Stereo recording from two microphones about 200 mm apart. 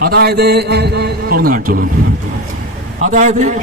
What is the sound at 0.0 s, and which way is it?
A man's voice, 50° right (ahead or behind).